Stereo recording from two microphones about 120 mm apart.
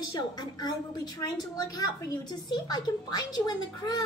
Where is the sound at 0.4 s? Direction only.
35° left (ahead or behind).